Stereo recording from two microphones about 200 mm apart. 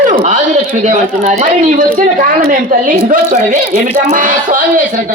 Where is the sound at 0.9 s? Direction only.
35° right (ahead or behind).